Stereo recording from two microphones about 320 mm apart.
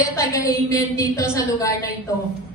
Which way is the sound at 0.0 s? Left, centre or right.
Centre.